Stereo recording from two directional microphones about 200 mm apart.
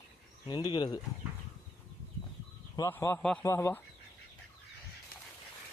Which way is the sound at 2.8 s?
15° left (ahead or behind).